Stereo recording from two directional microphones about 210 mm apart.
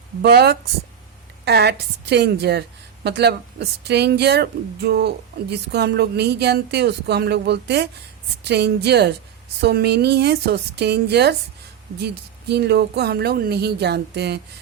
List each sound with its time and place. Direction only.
0.2 s a woman's voice: 50° right (ahead or behind)